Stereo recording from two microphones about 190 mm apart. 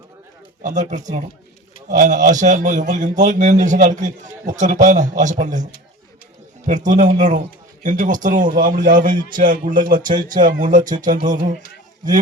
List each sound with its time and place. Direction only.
0.6 s a man's voice: 40° right (ahead or behind)
6.7 s a man's voice: 40° right (ahead or behind)